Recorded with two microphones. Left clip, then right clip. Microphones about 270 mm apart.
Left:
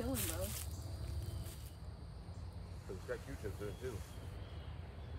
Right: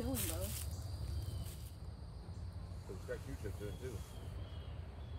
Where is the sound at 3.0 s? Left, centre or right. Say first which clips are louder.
Left 1 dB; centre.